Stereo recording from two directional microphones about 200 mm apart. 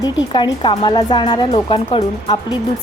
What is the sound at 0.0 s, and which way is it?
A woman's voice, 20° left (ahead or behind).